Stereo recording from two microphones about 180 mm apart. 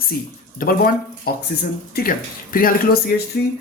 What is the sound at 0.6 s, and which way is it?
Speech, 55° left (ahead or behind).